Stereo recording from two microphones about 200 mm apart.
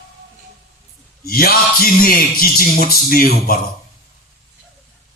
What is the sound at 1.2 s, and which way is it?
Music, 50° left (ahead or behind).